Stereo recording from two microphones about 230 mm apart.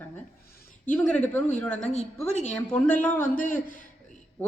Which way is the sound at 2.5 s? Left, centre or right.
Centre.